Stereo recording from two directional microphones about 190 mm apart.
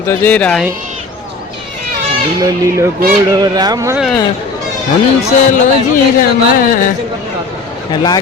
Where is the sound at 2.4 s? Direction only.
15° right (ahead or behind).